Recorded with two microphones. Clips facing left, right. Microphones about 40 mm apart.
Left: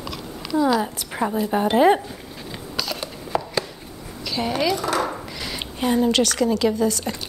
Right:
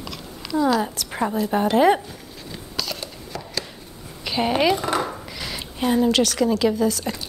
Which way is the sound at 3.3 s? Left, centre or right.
Left.